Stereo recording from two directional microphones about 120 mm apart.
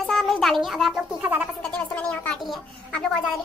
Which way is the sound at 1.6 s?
10° left (ahead or behind).